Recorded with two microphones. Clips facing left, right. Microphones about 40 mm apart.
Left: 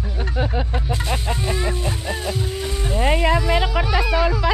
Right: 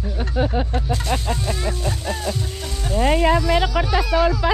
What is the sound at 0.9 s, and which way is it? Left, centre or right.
Speech, centre.